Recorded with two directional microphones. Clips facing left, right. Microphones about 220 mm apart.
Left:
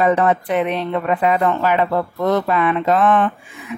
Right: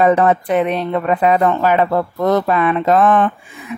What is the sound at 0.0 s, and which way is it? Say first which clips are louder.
A woman's voice: right 3 dB; 45° right (ahead or behind).